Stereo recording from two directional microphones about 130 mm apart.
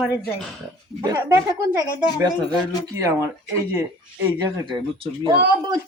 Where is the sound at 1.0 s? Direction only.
30° right (ahead or behind).